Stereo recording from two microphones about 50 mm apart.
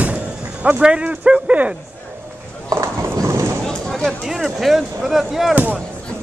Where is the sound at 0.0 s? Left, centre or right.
Right.